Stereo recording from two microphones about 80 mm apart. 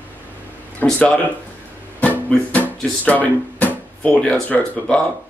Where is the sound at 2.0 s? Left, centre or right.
Centre.